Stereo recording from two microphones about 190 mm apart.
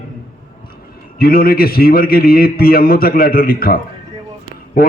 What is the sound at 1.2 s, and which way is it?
A man's voice, 50° left (ahead or behind).